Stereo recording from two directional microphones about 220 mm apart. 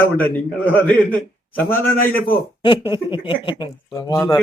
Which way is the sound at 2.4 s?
20° left (ahead or behind).